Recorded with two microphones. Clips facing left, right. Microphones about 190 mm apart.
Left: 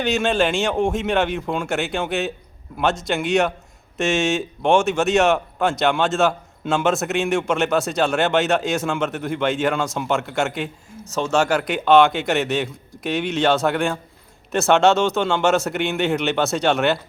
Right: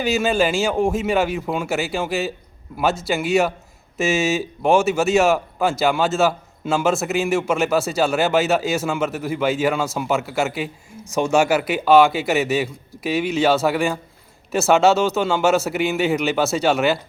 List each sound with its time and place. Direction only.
0.0 s speech: 5° right (ahead or behind)